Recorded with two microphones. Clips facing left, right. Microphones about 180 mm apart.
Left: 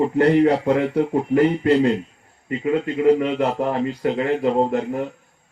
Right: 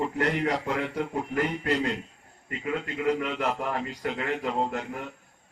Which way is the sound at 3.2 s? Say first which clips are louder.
Left 8 dB; 30° left (ahead or behind).